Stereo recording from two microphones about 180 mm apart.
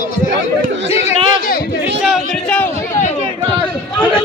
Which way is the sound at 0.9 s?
35° left (ahead or behind).